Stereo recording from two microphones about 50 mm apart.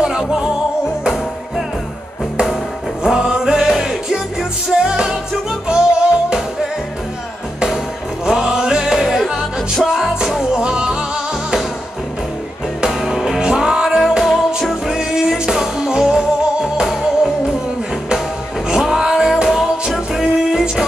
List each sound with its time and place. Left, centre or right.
0.0 s music: centre
3.0 s music: centre
8.3 s music: centre
10.6 s music: centre
12.8 s music: centre
18.7 s music: centre